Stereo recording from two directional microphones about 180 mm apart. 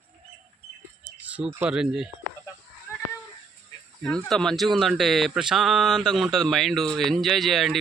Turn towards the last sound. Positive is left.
turn(degrees=0)  # may be behind; listen again after turning